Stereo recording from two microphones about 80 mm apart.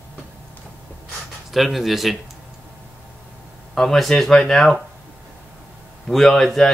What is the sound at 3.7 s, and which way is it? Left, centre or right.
Speech, centre.